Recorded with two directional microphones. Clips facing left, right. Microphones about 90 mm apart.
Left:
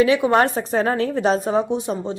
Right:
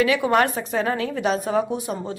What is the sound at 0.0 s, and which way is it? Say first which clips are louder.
A woman's voice: left 3 dB; 30° left (ahead or behind).